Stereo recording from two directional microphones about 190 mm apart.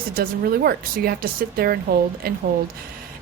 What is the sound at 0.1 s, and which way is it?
A woman's voice, 50° right (ahead or behind).